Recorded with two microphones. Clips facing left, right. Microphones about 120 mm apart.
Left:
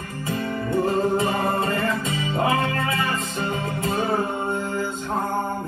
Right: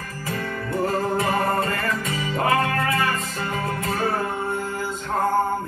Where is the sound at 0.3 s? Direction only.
25° left (ahead or behind).